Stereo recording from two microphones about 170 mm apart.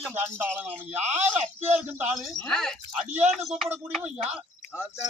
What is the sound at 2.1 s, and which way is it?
Speech, centre (ahead or behind).